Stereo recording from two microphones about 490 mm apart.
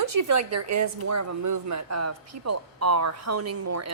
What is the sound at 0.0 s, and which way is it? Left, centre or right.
A woman's voice, right.